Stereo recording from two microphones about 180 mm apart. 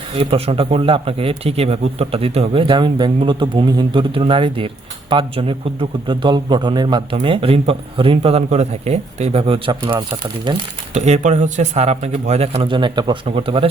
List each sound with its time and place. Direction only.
0.2 s speech: 35° right (ahead or behind)
10.9 s speech: 40° right (ahead or behind)